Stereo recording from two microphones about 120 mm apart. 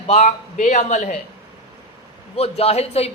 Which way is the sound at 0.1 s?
75° left (ahead or behind).